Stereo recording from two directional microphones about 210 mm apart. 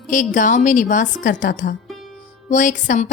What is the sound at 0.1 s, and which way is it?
A woman's voice, 40° left (ahead or behind).